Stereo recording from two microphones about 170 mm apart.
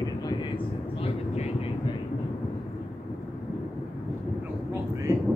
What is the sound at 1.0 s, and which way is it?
Vehicle, 40° left (ahead or behind).